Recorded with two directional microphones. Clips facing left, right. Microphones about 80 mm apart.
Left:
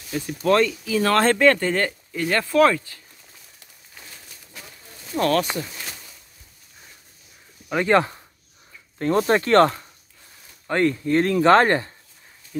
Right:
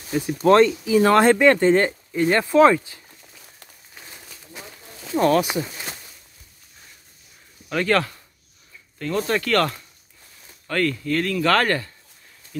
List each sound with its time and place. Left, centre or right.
0.4 s speech: right
0.9 s speech: centre
5.1 s speech: centre
7.7 s speech: centre
8.9 s speech: left